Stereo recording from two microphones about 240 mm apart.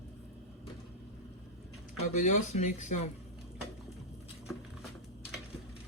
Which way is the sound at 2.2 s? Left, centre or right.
Left.